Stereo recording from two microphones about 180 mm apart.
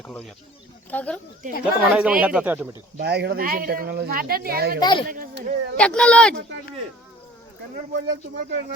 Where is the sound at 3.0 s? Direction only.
65° right (ahead or behind).